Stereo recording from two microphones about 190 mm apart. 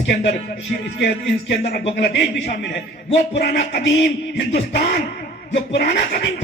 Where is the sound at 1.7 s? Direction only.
60° left (ahead or behind).